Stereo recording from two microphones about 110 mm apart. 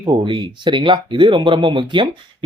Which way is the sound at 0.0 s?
50° right (ahead or behind).